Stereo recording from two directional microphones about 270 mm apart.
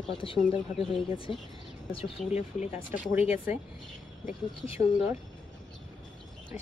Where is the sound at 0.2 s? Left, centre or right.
Left.